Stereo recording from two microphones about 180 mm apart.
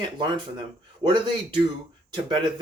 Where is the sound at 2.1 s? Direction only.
25° right (ahead or behind).